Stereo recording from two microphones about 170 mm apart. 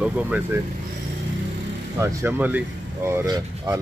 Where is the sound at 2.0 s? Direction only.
10° right (ahead or behind).